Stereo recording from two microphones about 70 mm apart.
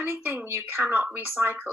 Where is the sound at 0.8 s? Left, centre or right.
Centre.